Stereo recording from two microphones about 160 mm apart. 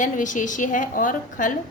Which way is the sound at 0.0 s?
50° left (ahead or behind).